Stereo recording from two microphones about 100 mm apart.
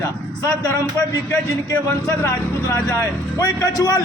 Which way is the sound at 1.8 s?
25° left (ahead or behind).